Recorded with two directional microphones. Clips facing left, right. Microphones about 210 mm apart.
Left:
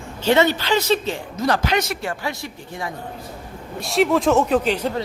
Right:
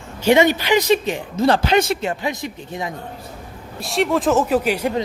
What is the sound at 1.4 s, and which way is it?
A man's voice, 30° right (ahead or behind).